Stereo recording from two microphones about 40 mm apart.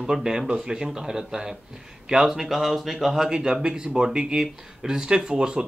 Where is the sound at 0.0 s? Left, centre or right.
Centre.